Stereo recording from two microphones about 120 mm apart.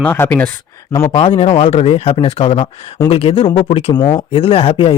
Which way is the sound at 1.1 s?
45° left (ahead or behind).